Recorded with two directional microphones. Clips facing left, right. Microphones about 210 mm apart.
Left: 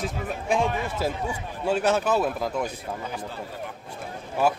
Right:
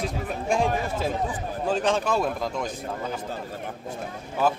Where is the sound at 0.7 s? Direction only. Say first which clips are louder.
Right 2 dB; 40° right (ahead or behind).